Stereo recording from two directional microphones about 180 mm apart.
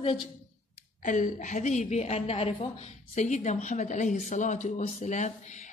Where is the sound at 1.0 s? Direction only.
45° left (ahead or behind).